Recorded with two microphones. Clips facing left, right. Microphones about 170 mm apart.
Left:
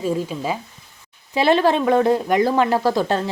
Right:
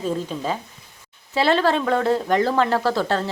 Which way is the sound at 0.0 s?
10° left (ahead or behind).